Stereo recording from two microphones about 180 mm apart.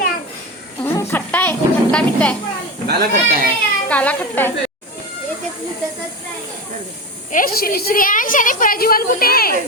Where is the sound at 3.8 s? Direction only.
10° left (ahead or behind).